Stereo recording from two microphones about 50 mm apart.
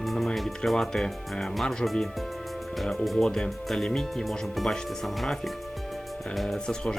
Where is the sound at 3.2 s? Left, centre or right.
Centre.